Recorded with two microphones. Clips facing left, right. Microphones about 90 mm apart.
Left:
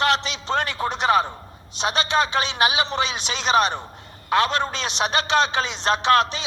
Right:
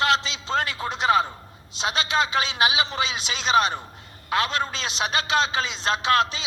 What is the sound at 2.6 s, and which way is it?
A man's voice, 30° left (ahead or behind).